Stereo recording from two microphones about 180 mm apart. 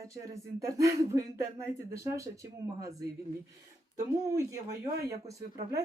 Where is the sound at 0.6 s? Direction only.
15° right (ahead or behind).